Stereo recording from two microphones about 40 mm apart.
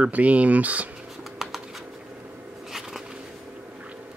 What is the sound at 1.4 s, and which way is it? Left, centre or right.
Bird, centre.